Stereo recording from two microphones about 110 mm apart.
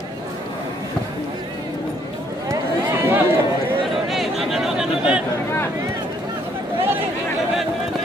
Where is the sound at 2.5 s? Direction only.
25° right (ahead or behind).